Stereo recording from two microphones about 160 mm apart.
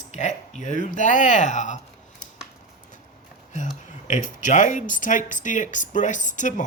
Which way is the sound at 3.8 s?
50° left (ahead or behind).